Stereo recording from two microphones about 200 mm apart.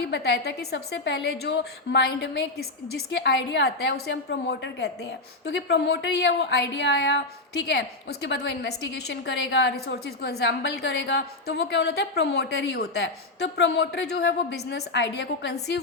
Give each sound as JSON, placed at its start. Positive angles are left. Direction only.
{"t": 0.1, "sound": "a woman's voice", "side_deg": 55}